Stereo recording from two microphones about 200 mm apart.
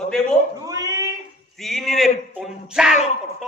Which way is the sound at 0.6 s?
20° right (ahead or behind).